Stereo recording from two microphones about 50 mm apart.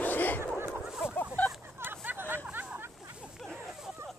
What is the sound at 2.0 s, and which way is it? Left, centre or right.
Hubbub, right.